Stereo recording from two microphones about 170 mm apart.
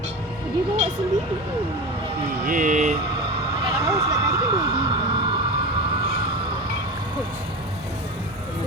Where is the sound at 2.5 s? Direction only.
50° right (ahead or behind).